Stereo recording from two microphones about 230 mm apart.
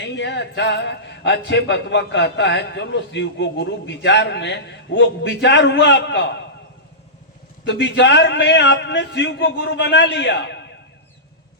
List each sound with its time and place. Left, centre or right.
0.0 s speech: left
7.7 s speech: left